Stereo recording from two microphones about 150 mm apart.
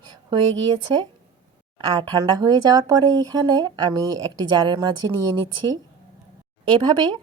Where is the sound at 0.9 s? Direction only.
30° right (ahead or behind).